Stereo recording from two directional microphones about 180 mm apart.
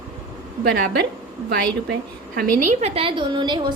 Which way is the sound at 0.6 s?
65° right (ahead or behind).